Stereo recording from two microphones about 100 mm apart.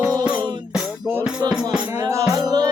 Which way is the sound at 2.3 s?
40° right (ahead or behind).